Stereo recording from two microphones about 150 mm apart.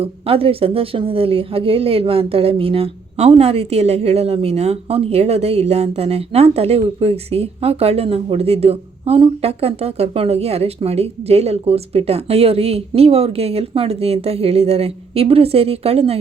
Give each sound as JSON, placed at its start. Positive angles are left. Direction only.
{"t": 0.0, "sound": "a woman's voice", "side_deg": -40}